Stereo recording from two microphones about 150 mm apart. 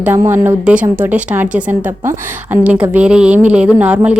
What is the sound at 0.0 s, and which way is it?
A woman's voice, 15° right (ahead or behind).